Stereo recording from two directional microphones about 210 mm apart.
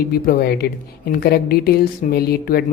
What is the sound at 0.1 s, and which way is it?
Speech, 45° left (ahead or behind).